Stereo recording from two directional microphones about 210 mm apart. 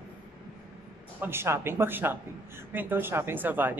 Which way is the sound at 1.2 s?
10° right (ahead or behind).